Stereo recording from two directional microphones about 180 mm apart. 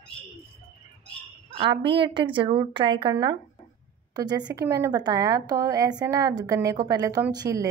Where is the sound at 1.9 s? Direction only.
25° right (ahead or behind).